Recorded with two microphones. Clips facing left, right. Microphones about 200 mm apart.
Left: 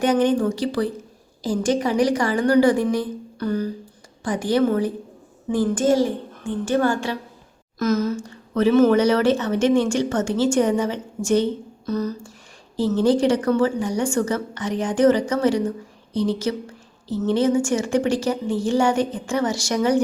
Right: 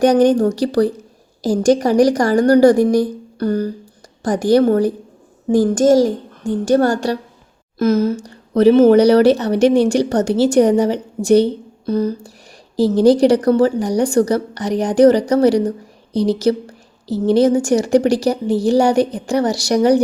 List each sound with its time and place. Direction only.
0.0 s a woman's voice: 40° right (ahead or behind)